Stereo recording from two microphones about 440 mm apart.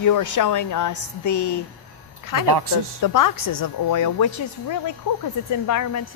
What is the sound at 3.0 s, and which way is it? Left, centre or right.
A woman's voice, left.